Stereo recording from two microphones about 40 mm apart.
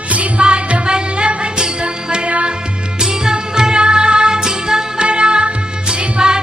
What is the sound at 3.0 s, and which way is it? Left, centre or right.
Music, centre.